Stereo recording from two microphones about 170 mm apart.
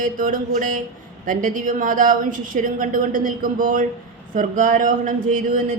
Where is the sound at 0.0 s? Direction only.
50° right (ahead or behind).